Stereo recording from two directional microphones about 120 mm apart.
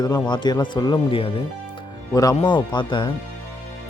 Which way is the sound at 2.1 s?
30° left (ahead or behind).